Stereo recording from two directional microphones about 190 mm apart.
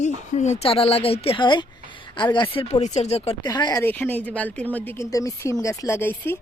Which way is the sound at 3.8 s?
10° left (ahead or behind).